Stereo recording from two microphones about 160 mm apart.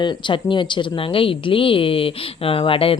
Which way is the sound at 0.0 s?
30° left (ahead or behind).